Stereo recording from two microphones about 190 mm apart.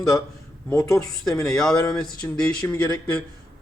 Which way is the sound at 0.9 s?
5° left (ahead or behind).